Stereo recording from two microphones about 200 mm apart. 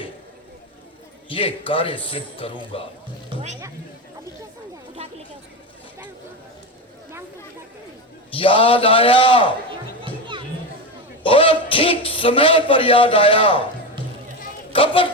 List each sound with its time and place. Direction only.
1.3 s a man's voice: 25° left (ahead or behind)
3.2 s speech: 30° right (ahead or behind)
8.4 s a man's voice: 25° left (ahead or behind)
11.2 s a man's voice: 25° left (ahead or behind)
14.7 s speech: 25° left (ahead or behind)